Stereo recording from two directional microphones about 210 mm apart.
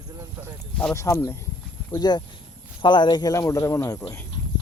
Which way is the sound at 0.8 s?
10° left (ahead or behind).